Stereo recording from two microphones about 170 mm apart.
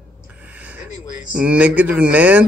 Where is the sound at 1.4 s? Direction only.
5° right (ahead or behind).